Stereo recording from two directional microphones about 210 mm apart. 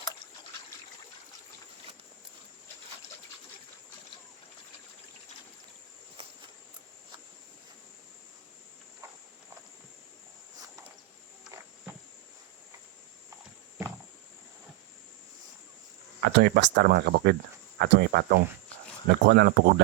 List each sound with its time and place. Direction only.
16.2 s speech: 55° right (ahead or behind)